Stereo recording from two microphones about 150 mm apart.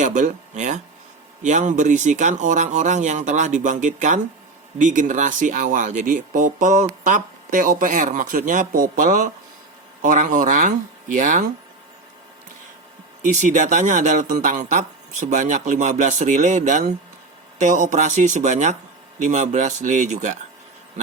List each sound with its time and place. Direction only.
0.0 s speech: 55° right (ahead or behind)
13.2 s speech: 55° right (ahead or behind)